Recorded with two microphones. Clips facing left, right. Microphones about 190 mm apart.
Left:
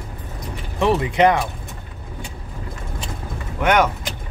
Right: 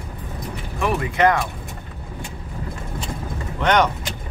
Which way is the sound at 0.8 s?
25° left (ahead or behind).